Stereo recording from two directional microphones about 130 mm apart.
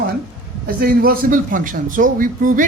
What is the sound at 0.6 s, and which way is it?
A man's voice, 90° right.